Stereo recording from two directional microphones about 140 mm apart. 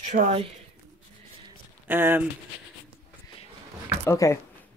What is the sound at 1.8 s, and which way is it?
Speech, 15° right (ahead or behind).